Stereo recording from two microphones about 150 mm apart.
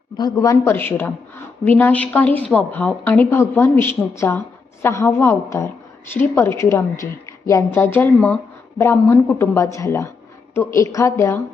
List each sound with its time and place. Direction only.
0.2 s a woman's voice: 25° left (ahead or behind)